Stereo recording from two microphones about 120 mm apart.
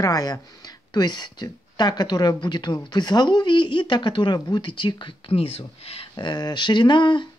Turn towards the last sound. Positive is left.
turn(degrees=40)  # may be behind; listen again after turning